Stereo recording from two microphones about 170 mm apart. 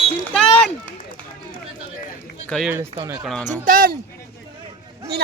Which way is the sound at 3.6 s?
55° right (ahead or behind).